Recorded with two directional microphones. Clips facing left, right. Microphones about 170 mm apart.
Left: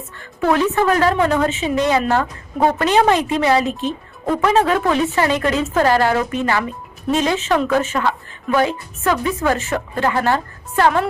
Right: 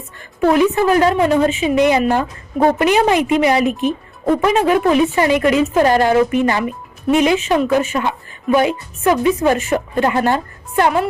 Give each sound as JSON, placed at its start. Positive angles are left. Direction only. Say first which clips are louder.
{"t": 0.5, "sound": "speech", "louder": "right 2 dB", "side_deg": -15}